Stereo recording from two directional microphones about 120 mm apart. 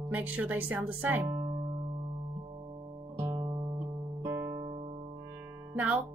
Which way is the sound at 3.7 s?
20° right (ahead or behind).